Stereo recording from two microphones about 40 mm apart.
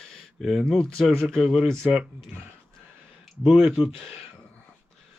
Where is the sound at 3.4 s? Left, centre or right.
Centre.